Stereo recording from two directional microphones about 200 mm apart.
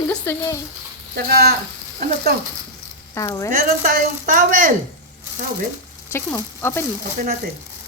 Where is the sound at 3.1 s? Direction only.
15° left (ahead or behind).